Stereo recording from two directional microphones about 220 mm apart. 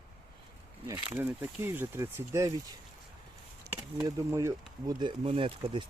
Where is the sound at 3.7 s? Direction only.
15° right (ahead or behind).